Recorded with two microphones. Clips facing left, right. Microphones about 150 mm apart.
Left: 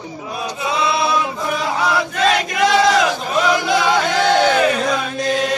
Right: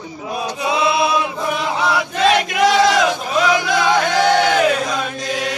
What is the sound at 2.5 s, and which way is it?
Chant, centre (ahead or behind).